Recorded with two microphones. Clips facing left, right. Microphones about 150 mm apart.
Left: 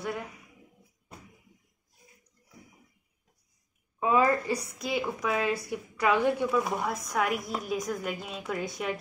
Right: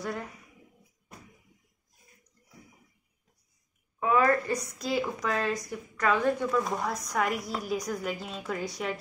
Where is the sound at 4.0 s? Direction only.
20° left (ahead or behind).